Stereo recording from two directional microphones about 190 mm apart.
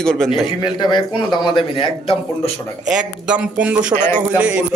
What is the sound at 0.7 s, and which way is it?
A man's voice, 25° left (ahead or behind).